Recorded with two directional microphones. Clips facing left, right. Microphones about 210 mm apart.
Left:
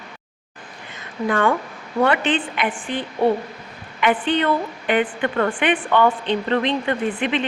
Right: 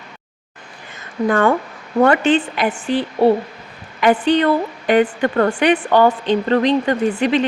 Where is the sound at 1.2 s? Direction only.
45° right (ahead or behind).